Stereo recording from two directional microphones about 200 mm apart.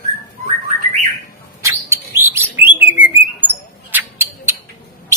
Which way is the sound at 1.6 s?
15° right (ahead or behind).